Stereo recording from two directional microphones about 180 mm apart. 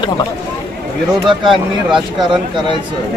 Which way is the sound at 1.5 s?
Centre (ahead or behind).